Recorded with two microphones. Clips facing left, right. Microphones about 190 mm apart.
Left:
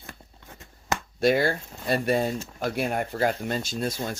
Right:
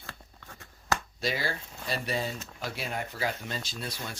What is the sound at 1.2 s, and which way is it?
Speech, 55° left (ahead or behind).